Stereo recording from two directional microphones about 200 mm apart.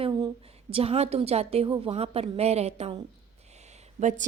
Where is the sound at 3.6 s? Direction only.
35° right (ahead or behind).